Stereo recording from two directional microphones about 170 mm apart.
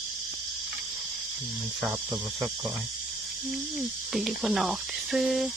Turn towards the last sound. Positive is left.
turn(degrees=0)  # may be behind; listen again after turning